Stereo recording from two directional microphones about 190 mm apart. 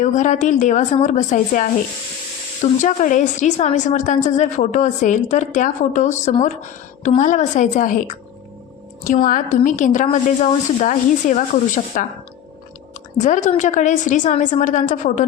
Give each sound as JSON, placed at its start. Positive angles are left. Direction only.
{"t": 0.0, "sound": "a woman's voice", "side_deg": 40}
{"t": 9.2, "sound": "a woman's voice", "side_deg": 45}
{"t": 13.1, "sound": "a woman's voice", "side_deg": 40}